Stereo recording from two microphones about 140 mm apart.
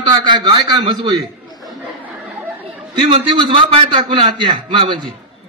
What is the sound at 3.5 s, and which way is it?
Speech, 35° right (ahead or behind).